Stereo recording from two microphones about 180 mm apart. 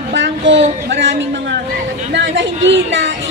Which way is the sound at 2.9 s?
90° right.